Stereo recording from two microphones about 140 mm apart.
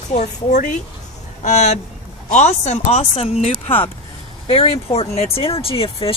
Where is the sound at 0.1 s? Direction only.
55° left (ahead or behind).